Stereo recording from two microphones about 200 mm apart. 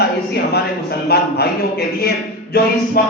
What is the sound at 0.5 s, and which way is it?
A man's voice, 50° left (ahead or behind).